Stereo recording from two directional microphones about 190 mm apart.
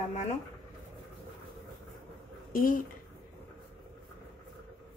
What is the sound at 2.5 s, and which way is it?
Speech, 50° left (ahead or behind).